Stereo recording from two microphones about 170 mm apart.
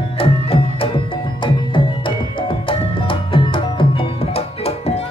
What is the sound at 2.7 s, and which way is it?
Music, 30° left (ahead or behind).